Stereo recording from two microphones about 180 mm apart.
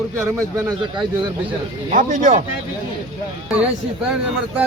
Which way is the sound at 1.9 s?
45° right (ahead or behind).